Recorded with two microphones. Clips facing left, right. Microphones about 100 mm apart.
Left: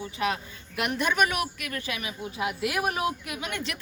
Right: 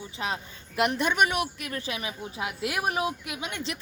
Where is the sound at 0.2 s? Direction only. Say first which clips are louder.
Left 3 dB; 25° right (ahead or behind).